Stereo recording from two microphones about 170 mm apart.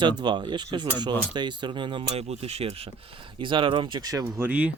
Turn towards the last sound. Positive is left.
turn(degrees=-10)  # may be behind; listen again after turning